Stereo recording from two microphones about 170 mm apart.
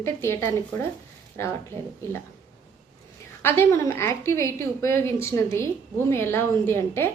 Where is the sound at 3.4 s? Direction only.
15° left (ahead or behind).